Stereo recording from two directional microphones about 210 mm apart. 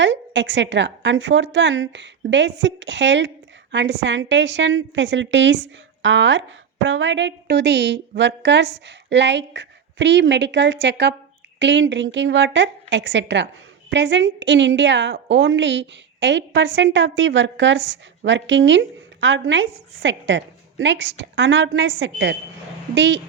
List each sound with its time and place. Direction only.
0.0 s a woman's voice: 60° right (ahead or behind)